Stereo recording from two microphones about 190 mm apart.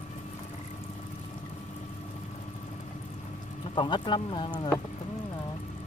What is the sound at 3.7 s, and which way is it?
Speech, 25° left (ahead or behind).